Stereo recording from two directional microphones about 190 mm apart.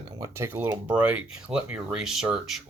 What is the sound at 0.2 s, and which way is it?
Speech, 15° right (ahead or behind).